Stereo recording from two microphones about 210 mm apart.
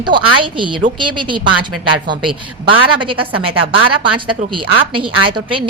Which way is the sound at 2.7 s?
25° right (ahead or behind).